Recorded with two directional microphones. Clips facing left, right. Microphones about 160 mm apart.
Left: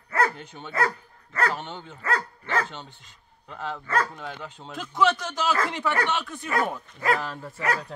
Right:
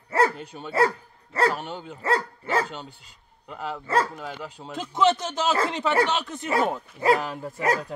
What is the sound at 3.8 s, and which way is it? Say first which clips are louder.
Speech: right 3 dB; 25° right (ahead or behind).